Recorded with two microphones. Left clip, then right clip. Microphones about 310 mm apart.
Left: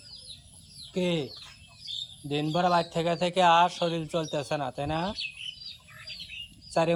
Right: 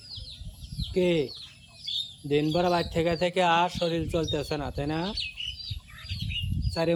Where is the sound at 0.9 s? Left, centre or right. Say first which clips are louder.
Right 4 dB; centre.